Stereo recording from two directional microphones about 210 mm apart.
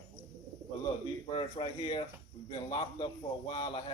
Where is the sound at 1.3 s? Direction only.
25° left (ahead or behind).